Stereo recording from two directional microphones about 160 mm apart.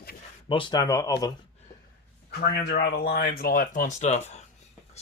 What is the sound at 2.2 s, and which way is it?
Speech, 90° left.